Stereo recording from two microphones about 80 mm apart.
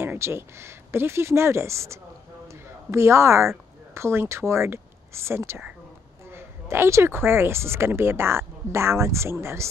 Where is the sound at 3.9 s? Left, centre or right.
Right.